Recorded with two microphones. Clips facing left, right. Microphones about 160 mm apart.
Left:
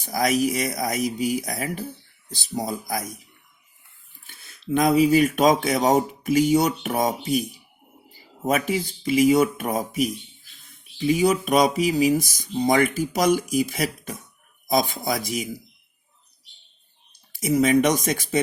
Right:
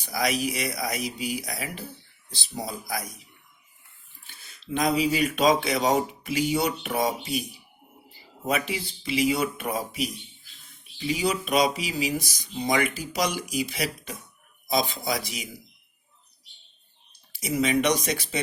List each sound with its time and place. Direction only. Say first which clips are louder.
0.0 s speech: left 5 dB; 45° left (ahead or behind)
4.6 s speech: left 6 dB; 50° left (ahead or behind)
8.4 s speech: left 5 dB; 45° left (ahead or behind)
17.3 s speech: left 6 dB; 45° left (ahead or behind)